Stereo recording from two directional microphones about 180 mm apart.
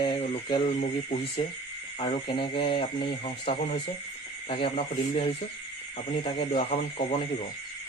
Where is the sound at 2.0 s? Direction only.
30° left (ahead or behind).